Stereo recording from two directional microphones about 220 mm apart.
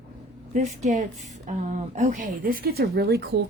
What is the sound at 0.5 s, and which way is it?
A woman's voice, 35° right (ahead or behind).